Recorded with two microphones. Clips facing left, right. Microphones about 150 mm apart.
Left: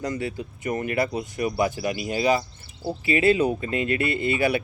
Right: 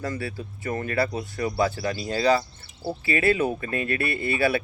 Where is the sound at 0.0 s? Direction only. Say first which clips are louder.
Left 2 dB; 20° left (ahead or behind).